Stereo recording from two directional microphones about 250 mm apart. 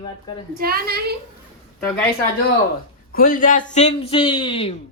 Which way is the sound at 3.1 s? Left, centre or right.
Left.